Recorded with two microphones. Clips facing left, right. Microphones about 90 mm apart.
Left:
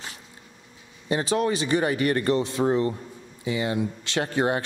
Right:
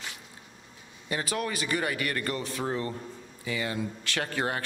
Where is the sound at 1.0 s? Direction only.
25° left (ahead or behind).